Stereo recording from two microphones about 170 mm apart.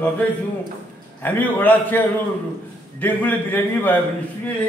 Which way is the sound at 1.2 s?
10° left (ahead or behind).